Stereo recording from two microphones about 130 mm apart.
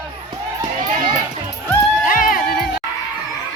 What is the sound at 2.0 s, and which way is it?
Run, 90° left.